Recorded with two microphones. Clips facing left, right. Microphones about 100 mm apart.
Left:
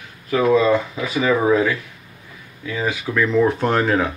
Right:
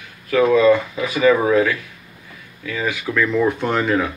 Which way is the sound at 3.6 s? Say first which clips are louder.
Left 1 dB; 35° left (ahead or behind).